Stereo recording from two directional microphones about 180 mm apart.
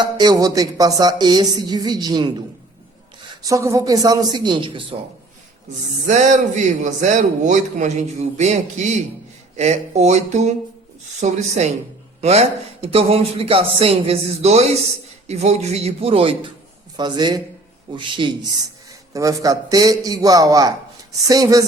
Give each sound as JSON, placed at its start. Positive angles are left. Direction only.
{"t": 0.0, "sound": "speech", "side_deg": -25}
{"t": 3.4, "sound": "speech", "side_deg": -15}
{"t": 6.1, "sound": "speech", "side_deg": -40}